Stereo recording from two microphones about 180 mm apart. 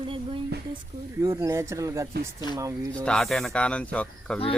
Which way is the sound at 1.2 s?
15° right (ahead or behind).